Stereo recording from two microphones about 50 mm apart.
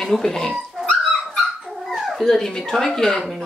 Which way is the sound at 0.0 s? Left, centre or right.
Centre.